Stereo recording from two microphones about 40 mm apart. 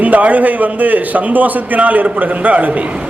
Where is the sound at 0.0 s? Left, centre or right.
Right.